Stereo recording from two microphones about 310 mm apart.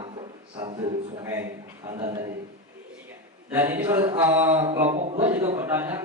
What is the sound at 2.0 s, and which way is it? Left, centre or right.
Speech, centre.